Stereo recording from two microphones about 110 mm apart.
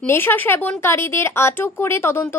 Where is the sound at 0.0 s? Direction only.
20° left (ahead or behind).